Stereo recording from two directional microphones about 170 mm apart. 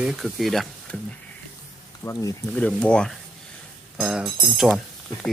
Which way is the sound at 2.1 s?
20° left (ahead or behind).